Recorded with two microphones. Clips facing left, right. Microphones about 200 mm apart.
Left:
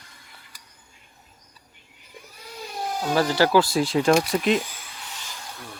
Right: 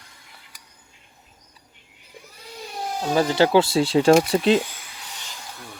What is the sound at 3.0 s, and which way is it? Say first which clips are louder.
Speech: right 2 dB; 20° right (ahead or behind).